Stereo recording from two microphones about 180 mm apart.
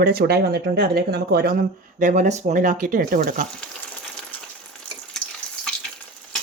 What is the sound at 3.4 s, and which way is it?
Frying, 5° left (ahead or behind).